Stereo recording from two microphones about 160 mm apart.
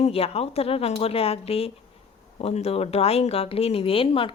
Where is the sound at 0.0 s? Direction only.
40° left (ahead or behind).